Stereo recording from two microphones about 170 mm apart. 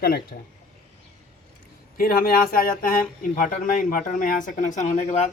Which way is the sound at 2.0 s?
60° left (ahead or behind).